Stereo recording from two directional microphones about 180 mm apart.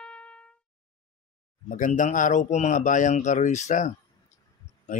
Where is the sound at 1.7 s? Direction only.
45° left (ahead or behind).